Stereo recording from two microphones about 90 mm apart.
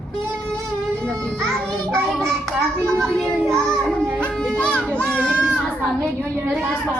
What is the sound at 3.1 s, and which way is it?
Speech, 5° left (ahead or behind).